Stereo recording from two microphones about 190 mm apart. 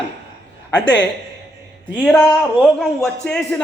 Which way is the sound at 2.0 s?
5° left (ahead or behind).